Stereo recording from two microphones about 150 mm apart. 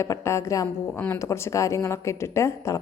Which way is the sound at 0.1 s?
20° left (ahead or behind).